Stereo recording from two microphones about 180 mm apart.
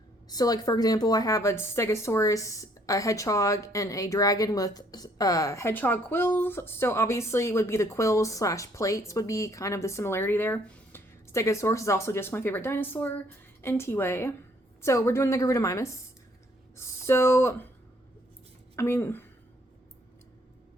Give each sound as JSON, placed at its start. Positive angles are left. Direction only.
{"t": 0.3, "sound": "a woman's voice", "side_deg": 20}
{"t": 18.8, "sound": "a woman's voice", "side_deg": 15}